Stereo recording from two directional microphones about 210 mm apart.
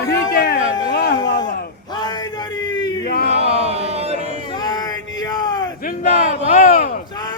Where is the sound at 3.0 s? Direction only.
45° left (ahead or behind).